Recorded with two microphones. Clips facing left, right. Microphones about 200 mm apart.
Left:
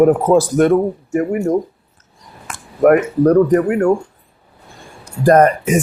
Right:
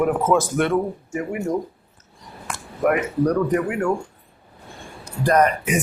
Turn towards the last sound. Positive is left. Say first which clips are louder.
# left 7 dB
turn(degrees=45)  # may be behind; listen again after turning